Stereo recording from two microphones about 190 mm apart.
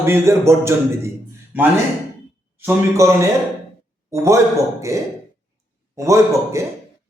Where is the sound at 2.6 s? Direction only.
15° right (ahead or behind).